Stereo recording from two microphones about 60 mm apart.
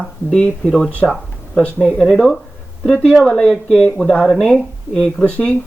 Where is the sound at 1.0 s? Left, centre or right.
Centre.